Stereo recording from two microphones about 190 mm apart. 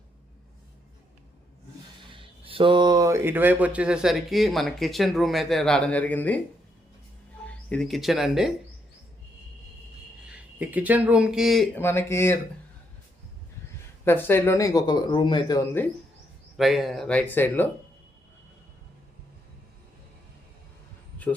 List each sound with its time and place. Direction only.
2.1 s speech: 30° right (ahead or behind); by 6.4 s 10° left (ahead or behind)
7.4 s speech: 5° left (ahead or behind)
10.2 s speech: 5° right (ahead or behind); by 12.4 s 15° left (ahead or behind)
14.0 s speech: 10° left (ahead or behind)
16.6 s speech: centre (ahead or behind)
21.3 s speech: 10° left (ahead or behind)